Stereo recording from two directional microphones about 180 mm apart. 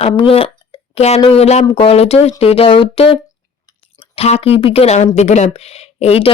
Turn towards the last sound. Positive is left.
turn(degrees=35)  # may be behind; listen again after turning